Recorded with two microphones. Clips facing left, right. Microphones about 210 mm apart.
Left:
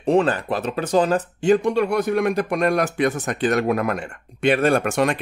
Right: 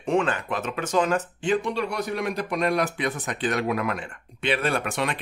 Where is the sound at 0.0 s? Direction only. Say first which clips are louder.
Left 5 dB; 35° left (ahead or behind).